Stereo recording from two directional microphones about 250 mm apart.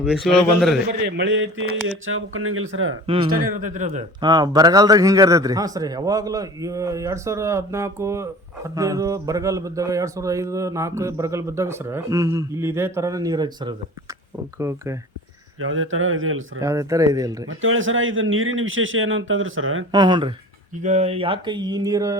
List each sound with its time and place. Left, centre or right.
0.3 s a man's voice: centre
1.0 s a man's voice: right
3.2 s speech: right
4.2 s a man's voice: centre
15.6 s a man's voice: right
16.6 s a man's voice: centre
17.6 s a man's voice: right
19.9 s a man's voice: centre